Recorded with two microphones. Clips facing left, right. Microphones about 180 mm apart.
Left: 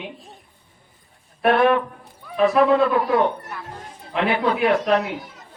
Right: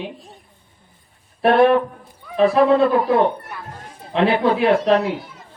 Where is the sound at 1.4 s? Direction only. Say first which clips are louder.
Right 3 dB; 30° right (ahead or behind).